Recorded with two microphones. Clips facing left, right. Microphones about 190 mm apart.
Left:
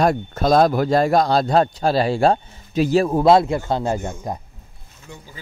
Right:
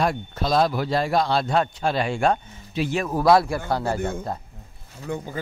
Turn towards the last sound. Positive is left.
turn(degrees=-55)  # may be behind; listen again after turning